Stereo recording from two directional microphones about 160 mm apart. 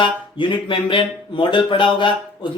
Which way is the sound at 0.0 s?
30° left (ahead or behind).